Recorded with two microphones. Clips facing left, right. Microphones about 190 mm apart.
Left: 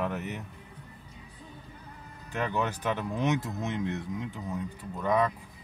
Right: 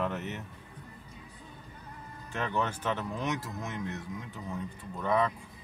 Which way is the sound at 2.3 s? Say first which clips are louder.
Left 2 dB; 10° left (ahead or behind).